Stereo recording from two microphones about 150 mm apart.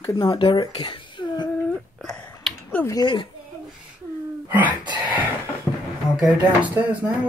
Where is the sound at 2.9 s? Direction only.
30° left (ahead or behind).